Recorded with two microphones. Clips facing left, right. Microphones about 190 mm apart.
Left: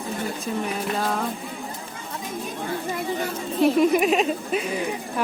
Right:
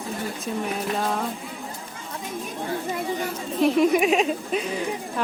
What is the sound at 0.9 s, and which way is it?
Speech, centre (ahead or behind).